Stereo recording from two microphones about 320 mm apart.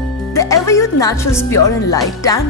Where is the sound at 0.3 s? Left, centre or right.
Centre.